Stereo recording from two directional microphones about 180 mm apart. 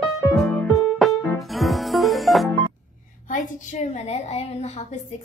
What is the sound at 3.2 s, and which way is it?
A woman's voice, 45° left (ahead or behind).